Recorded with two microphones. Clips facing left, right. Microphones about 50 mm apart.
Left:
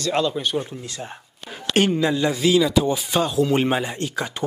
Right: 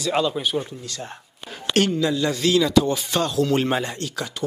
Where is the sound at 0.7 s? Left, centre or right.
Left.